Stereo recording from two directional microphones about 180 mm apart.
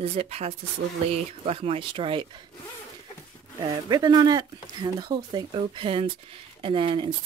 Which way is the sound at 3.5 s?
20° right (ahead or behind).